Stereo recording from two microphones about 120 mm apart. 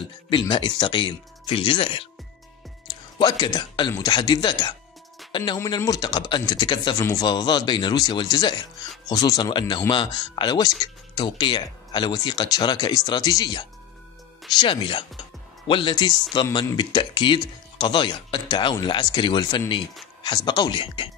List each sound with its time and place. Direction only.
0.3 s speech: 40° left (ahead or behind)
3.2 s speech: 35° left (ahead or behind)
5.6 s speech: 30° left (ahead or behind)
7.0 s speech: 30° left (ahead or behind)